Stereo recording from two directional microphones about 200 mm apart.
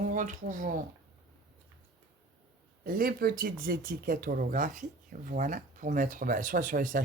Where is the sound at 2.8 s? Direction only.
45° right (ahead or behind).